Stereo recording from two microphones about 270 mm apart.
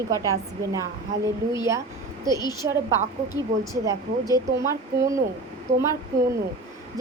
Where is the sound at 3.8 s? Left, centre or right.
Centre.